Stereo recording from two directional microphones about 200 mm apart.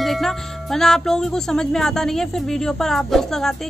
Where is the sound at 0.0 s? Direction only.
Centre (ahead or behind).